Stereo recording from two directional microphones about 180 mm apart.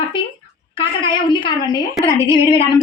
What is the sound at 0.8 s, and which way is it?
A woman's voice, 30° left (ahead or behind).